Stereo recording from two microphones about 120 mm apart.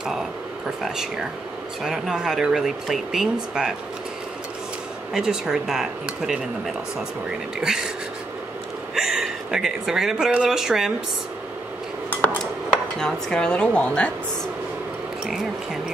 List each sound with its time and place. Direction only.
0.8 s speech: 5° right (ahead or behind)
5.1 s speech: 5° right (ahead or behind)
8.9 s speech: 5° right (ahead or behind)
13.0 s a woman's voice: 5° left (ahead or behind)